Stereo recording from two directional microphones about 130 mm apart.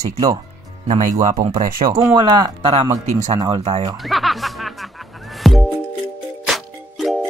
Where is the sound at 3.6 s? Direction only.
55° right (ahead or behind).